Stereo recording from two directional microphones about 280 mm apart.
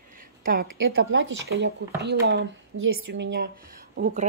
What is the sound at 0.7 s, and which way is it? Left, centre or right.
A woman's voice, right.